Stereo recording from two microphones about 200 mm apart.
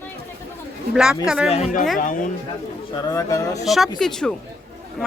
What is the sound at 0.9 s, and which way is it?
Speech, 5° right (ahead or behind).